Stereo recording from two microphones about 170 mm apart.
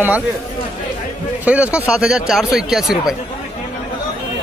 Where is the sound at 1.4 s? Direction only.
10° right (ahead or behind).